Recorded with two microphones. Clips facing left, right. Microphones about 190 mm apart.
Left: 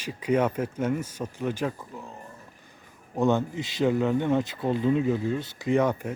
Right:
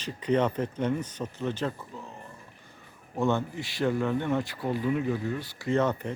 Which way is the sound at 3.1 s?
15° left (ahead or behind).